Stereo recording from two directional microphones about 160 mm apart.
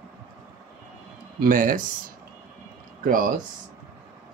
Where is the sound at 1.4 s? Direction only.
60° right (ahead or behind).